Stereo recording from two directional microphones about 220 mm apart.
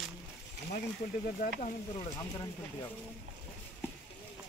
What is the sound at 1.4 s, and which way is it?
Speech, 35° left (ahead or behind).